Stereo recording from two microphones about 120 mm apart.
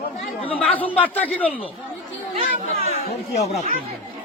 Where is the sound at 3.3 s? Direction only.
65° left (ahead or behind).